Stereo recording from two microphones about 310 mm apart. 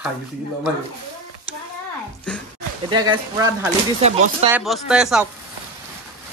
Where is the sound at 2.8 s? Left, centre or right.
Centre.